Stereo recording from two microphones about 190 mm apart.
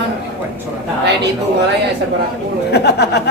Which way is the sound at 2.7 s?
60° left (ahead or behind).